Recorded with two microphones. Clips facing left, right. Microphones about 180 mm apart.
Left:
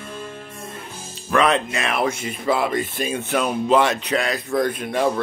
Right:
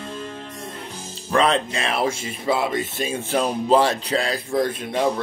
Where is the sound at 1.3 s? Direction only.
30° right (ahead or behind).